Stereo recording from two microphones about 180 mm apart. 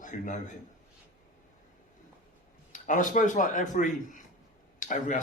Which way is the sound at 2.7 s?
45° left (ahead or behind).